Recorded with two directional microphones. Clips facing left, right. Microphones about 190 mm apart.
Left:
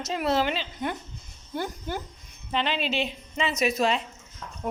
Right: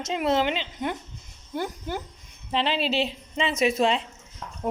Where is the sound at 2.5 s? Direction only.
30° right (ahead or behind).